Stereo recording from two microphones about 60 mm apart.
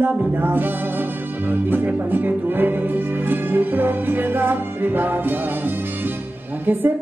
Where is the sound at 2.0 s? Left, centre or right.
Right.